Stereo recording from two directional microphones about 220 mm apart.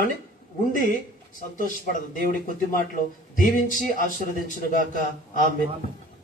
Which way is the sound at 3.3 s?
40° left (ahead or behind).